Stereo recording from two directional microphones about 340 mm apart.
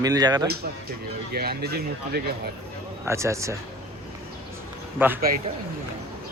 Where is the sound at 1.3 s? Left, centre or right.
Right.